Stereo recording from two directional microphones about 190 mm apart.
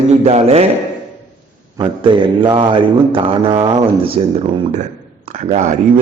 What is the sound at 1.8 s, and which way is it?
Mantra, 25° right (ahead or behind).